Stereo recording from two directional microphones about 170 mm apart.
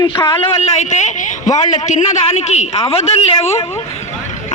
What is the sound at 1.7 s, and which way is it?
A man's voice, 45° left (ahead or behind).